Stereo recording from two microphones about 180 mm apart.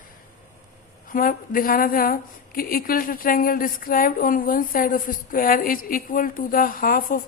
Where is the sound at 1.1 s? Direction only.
50° left (ahead or behind).